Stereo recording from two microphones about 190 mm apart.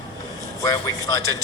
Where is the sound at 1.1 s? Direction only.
20° left (ahead or behind).